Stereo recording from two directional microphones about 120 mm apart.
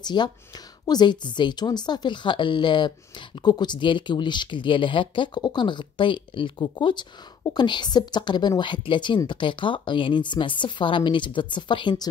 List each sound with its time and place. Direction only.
0.0 s speech: 40° left (ahead or behind)